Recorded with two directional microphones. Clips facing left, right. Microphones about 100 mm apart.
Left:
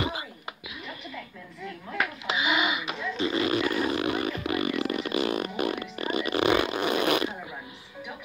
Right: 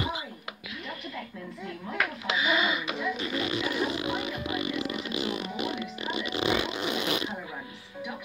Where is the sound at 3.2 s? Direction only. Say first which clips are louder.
Left 5 dB; 30° left (ahead or behind).